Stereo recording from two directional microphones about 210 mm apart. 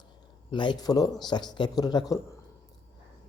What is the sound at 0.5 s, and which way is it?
Speech, 20° left (ahead or behind).